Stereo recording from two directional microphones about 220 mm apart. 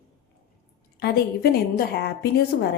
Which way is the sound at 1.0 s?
45° left (ahead or behind).